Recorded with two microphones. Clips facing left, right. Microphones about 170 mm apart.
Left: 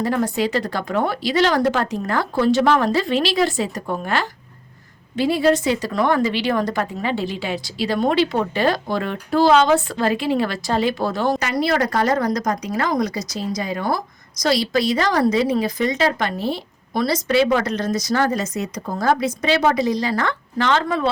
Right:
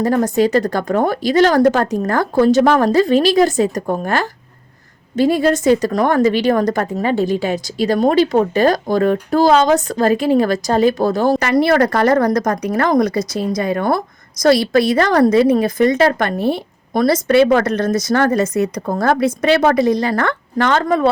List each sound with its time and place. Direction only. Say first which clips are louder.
0.0 s a woman's voice: right 6 dB; 45° right (ahead or behind)
11.3 s a woman's voice: right 7 dB; 60° right (ahead or behind); by 21.1 s 45° right (ahead or behind)